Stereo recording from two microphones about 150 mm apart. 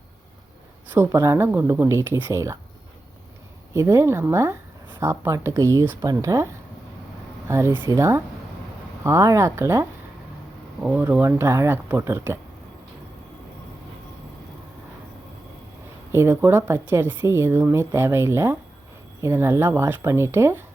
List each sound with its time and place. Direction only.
0.9 s speech: 20° right (ahead or behind)
3.8 s speech: 20° right (ahead or behind)
10.8 s speech: 10° right (ahead or behind)
16.1 s speech: 15° right (ahead or behind)